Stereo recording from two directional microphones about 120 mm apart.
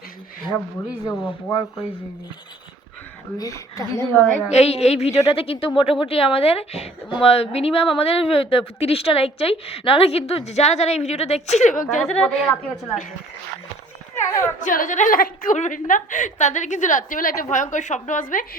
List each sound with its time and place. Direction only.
1.0 s speech: 25° left (ahead or behind)
3.3 s speech: 30° left (ahead or behind)
4.2 s a woman's voice: 10° left (ahead or behind)
4.5 s speech: 60° left (ahead or behind)
5.3 s speech: 50° left (ahead or behind); by 11.7 s 70° left (ahead or behind)
11.9 s a woman's voice: 5° left (ahead or behind)
14.3 s a woman's voice: 25° left (ahead or behind)
14.6 s a woman's voice: 90° left